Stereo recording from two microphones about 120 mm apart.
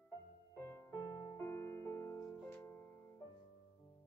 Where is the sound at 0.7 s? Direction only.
20° left (ahead or behind).